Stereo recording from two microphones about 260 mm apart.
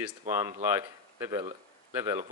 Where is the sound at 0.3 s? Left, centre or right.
Centre.